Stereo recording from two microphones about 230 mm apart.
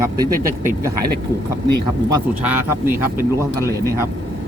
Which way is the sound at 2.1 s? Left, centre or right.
Centre.